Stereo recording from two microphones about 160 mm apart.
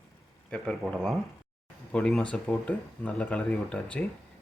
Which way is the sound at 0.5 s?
5° left (ahead or behind).